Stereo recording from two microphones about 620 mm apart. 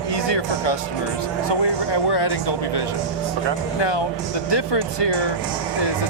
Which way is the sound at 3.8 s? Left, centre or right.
Left.